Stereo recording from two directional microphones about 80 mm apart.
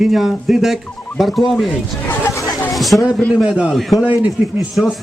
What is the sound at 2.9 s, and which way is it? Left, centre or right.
Speech, centre.